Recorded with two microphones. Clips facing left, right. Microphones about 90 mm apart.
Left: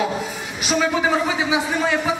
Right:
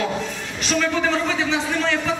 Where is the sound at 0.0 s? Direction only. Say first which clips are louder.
Left 1 dB; 10° left (ahead or behind).